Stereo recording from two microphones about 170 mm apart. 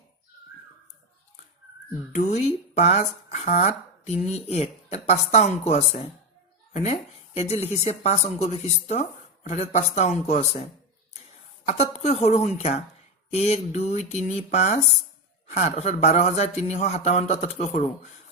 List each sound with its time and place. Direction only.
2.1 s speech: 45° left (ahead or behind)
7.3 s speech: 40° left (ahead or behind)